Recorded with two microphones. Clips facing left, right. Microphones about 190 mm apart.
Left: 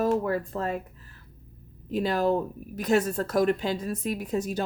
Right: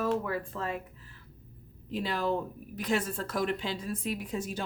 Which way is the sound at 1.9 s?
45° left (ahead or behind).